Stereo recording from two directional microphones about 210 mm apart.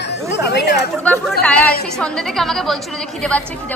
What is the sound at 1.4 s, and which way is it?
A woman's voice, 5° left (ahead or behind).